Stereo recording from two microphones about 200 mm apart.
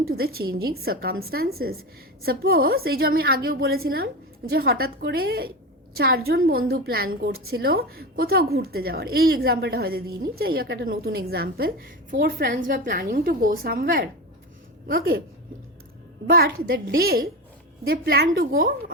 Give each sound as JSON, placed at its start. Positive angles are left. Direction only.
{"t": 0.3, "sound": "a woman's voice", "side_deg": -50}
{"t": 16.2, "sound": "a woman's voice", "side_deg": -50}